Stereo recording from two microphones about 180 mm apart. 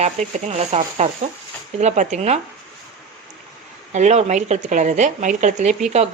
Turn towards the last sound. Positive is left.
turn(degrees=-40)  # may be behind; listen again after turning